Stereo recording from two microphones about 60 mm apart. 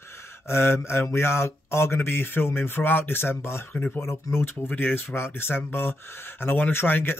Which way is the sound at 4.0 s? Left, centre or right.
Left.